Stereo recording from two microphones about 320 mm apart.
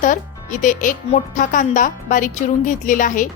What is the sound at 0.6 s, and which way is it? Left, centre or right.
Speech, left.